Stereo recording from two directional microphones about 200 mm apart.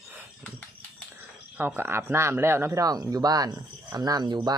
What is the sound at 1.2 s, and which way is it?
Speech, 10° right (ahead or behind).